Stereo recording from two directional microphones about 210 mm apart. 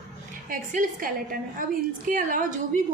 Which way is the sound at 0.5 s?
40° right (ahead or behind).